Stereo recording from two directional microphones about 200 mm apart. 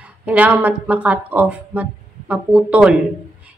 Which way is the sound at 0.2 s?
5° right (ahead or behind).